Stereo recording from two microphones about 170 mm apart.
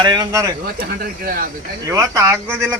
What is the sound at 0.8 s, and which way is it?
Speech, 60° right (ahead or behind).